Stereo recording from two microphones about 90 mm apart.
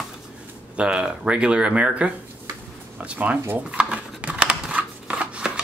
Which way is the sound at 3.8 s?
15° right (ahead or behind).